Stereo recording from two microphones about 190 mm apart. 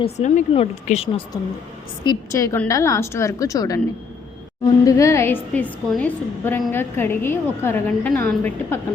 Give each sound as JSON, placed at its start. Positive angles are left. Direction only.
{"t": 0.0, "sound": "speech", "side_deg": 40}
{"t": 2.0, "sound": "a woman's voice", "side_deg": 15}
{"t": 4.9, "sound": "a woman's voice", "side_deg": 15}